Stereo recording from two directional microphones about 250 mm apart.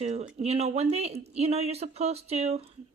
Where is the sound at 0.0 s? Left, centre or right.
Right.